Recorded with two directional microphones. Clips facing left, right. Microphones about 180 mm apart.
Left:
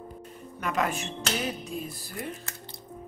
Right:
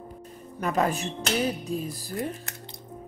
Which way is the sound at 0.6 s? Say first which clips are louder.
Right 3 dB; 35° right (ahead or behind).